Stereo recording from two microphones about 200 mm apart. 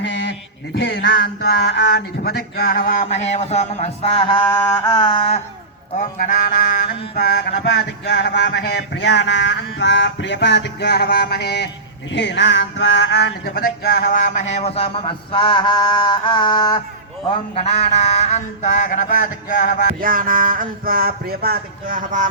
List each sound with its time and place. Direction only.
0.9 s speech: 60° left (ahead or behind); by 5.4 s 25° left (ahead or behind)
6.0 s speech: 40° left (ahead or behind)
7.2 s a sound: 50° left (ahead or behind)
12.1 s speech: 60° left (ahead or behind); by 16.8 s 20° left (ahead or behind)
17.5 s speech: 30° left (ahead or behind)
20.0 s a sound: 45° right (ahead or behind)